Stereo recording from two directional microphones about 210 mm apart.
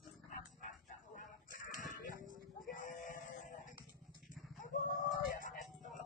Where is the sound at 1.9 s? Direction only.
40° left (ahead or behind).